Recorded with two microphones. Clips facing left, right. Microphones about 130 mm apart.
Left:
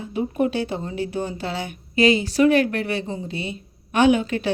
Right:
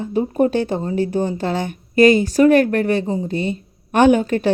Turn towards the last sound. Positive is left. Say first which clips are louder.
# right 4 dB
turn(degrees=-45)  # may be behind; listen again after turning